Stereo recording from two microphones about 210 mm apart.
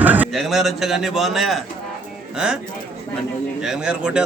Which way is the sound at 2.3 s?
5° right (ahead or behind).